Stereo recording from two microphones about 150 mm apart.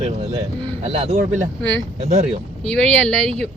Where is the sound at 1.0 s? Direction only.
55° right (ahead or behind).